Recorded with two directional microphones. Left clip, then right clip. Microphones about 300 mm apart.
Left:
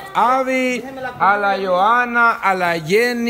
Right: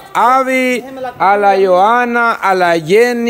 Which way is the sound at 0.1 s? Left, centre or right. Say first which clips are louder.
Right 5 dB; centre.